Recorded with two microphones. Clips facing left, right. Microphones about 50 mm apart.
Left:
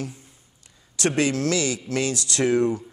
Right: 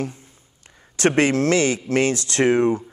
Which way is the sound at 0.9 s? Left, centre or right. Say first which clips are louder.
Right 5 dB; right.